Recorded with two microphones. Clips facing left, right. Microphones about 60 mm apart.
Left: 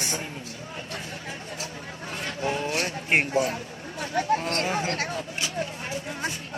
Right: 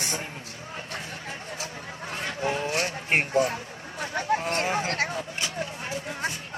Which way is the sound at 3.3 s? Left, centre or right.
Right.